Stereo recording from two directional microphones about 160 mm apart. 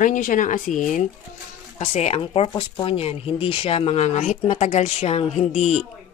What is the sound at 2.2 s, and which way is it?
Speech, 30° left (ahead or behind).